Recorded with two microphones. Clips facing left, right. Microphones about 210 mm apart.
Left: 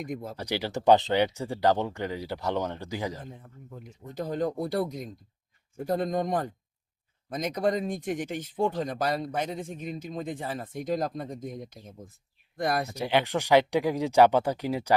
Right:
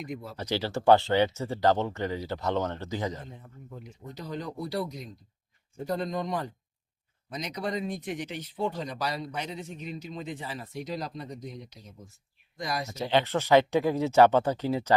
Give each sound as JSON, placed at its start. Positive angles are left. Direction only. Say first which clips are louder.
{"t": 0.0, "sound": "speech", "louder": "left 3 dB", "side_deg": 50}
{"t": 0.3, "sound": "speech", "louder": "right 2 dB", "side_deg": 15}
{"t": 3.8, "sound": "speech", "louder": "left 6 dB", "side_deg": 50}
{"t": 12.9, "sound": "speech", "louder": "even", "side_deg": 10}